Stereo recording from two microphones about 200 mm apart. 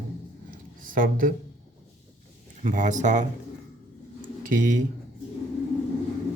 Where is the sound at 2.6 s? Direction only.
40° right (ahead or behind).